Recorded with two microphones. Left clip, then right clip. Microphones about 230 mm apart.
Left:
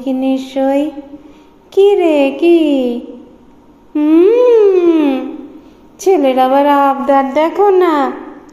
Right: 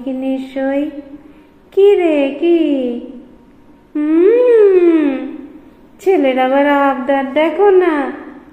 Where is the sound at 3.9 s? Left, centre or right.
Left.